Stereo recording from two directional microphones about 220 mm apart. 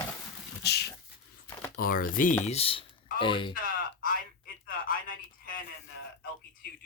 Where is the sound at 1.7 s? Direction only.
40° left (ahead or behind).